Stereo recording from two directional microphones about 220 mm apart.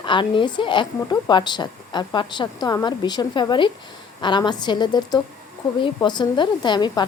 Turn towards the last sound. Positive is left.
turn(degrees=20)  # may be behind; listen again after turning